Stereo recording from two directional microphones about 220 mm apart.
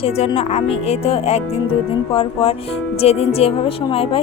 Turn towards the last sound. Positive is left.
turn(degrees=25)  # may be behind; listen again after turning